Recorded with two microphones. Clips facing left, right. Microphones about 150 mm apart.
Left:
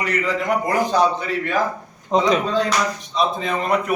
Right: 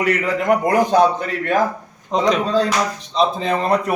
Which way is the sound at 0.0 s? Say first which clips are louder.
Right 3 dB; 55° right (ahead or behind).